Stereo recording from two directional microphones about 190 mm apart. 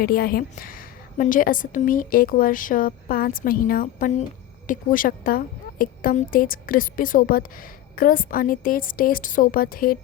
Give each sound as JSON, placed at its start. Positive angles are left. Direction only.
{"t": 0.0, "sound": "a woman's voice", "side_deg": 50}